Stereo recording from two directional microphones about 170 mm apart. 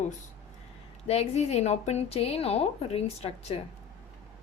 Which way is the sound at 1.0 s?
35° left (ahead or behind).